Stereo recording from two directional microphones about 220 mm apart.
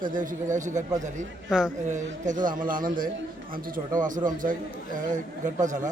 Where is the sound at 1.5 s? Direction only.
5° right (ahead or behind).